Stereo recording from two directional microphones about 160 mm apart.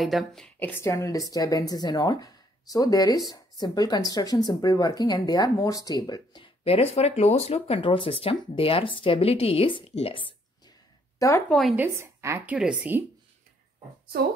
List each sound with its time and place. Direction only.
0.0 s a woman's voice: centre (ahead or behind)
0.6 s speech: 15° left (ahead or behind); by 10.3 s 35° left (ahead or behind)
11.1 s speech: 20° left (ahead or behind)
11.4 s a woman's voice: 5° left (ahead or behind)
11.7 s speech: 15° right (ahead or behind)